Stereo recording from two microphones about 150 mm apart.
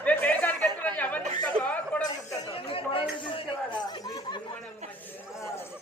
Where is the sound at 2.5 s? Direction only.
35° left (ahead or behind).